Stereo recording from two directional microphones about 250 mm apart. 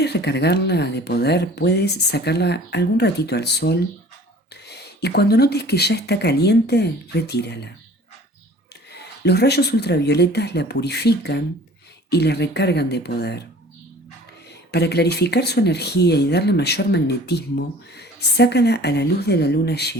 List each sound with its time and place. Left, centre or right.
0.0 s speech: left
8.9 s speech: left
14.7 s speech: left